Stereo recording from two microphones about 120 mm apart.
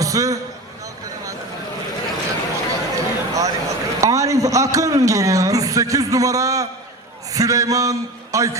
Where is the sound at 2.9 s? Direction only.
25° right (ahead or behind).